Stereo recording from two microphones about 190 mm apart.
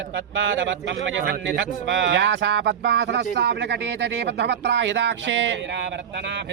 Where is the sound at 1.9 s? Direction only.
70° right (ahead or behind).